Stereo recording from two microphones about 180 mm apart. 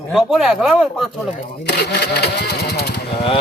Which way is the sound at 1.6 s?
65° left (ahead or behind).